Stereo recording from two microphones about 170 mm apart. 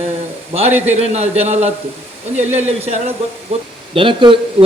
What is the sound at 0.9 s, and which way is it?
A man's voice, 40° right (ahead or behind).